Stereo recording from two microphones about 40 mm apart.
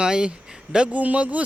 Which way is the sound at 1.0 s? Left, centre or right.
Right.